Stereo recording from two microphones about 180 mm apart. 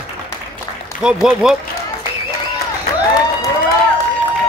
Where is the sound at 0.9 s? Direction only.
50° left (ahead or behind).